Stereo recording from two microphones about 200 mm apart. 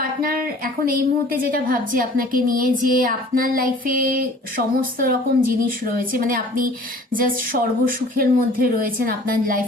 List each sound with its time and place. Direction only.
0.2 s a woman's voice: 45° right (ahead or behind)